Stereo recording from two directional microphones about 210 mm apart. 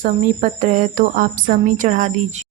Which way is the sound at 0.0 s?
35° right (ahead or behind).